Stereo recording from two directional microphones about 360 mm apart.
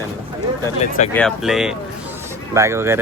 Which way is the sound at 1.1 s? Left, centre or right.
Centre.